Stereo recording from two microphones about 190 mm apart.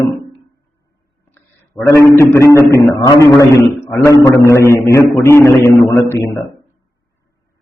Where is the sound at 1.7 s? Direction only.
15° left (ahead or behind).